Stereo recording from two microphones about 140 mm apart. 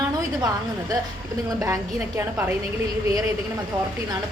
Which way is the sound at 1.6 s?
20° right (ahead or behind).